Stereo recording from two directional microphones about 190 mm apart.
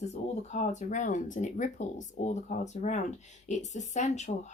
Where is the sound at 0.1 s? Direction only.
40° left (ahead or behind).